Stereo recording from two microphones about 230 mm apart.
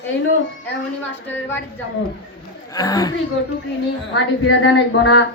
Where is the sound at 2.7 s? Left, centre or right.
Centre.